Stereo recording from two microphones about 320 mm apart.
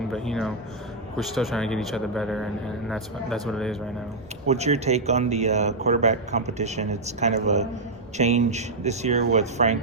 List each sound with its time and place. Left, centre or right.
0.1 s speech: centre
4.4 s speech: centre